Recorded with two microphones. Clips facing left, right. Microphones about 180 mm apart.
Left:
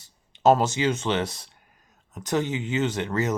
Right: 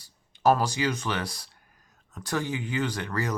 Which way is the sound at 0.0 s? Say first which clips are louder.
Left 3 dB; 20° left (ahead or behind).